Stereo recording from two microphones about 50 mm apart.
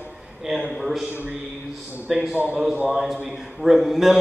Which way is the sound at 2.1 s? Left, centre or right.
Centre.